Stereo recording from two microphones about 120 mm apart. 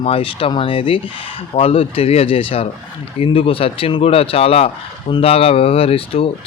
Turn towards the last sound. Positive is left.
turn(degrees=50)  # may be behind; listen again after turning